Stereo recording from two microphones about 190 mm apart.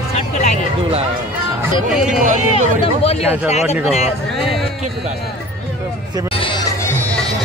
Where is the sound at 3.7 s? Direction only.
35° left (ahead or behind).